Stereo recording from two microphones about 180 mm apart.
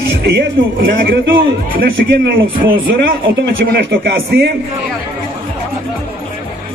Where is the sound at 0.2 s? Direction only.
60° right (ahead or behind).